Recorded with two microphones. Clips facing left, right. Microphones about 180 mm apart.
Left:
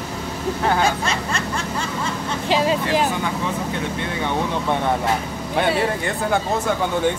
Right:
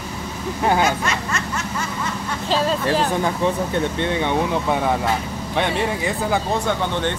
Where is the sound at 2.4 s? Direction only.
15° left (ahead or behind).